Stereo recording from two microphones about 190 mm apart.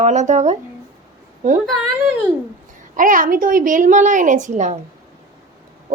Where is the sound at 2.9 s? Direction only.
45° right (ahead or behind).